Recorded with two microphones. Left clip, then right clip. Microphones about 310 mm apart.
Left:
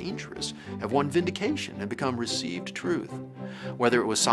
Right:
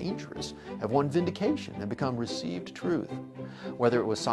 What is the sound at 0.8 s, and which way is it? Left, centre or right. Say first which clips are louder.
Speech: left 2 dB; right.